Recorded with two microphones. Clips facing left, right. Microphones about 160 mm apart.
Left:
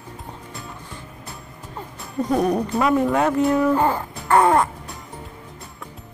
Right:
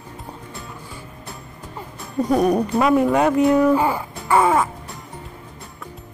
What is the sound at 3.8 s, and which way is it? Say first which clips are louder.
Music: even; 10° right (ahead or behind).